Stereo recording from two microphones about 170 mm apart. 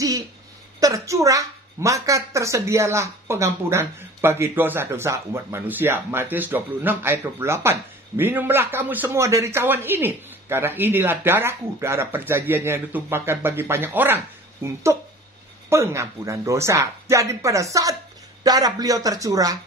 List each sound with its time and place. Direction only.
0.7 s speech: 20° right (ahead or behind)